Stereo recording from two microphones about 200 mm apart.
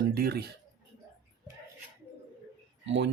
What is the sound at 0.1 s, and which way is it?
Speech, 50° right (ahead or behind).